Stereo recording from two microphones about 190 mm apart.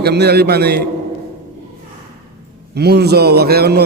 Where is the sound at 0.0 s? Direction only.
60° right (ahead or behind).